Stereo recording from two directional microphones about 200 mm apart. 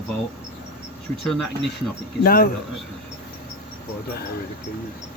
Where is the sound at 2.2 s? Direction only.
45° left (ahead or behind).